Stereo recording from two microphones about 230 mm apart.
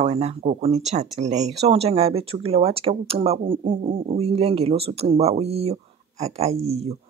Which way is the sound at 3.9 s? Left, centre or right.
Right.